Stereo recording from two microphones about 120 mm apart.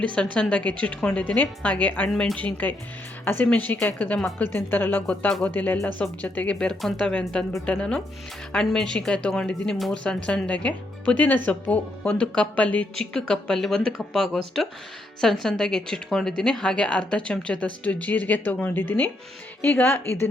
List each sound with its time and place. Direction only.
0.3 s a woman's voice: 10° left (ahead or behind)